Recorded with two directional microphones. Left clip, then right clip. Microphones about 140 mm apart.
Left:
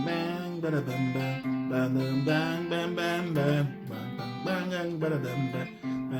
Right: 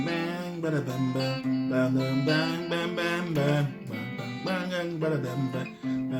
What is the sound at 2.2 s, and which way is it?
Music, 10° left (ahead or behind).